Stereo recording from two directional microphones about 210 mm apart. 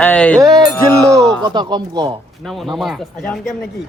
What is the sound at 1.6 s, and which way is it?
Speech, 20° right (ahead or behind).